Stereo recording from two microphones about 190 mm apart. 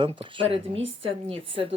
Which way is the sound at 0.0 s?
25° right (ahead or behind).